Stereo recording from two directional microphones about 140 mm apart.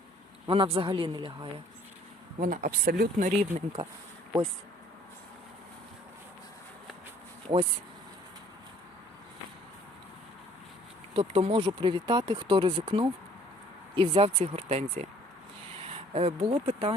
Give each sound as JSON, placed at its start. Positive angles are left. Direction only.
{"t": 0.4, "sound": "speech", "side_deg": -40}
{"t": 2.4, "sound": "speech", "side_deg": -75}
{"t": 11.1, "sound": "speech", "side_deg": -45}
{"t": 16.1, "sound": "speech", "side_deg": -40}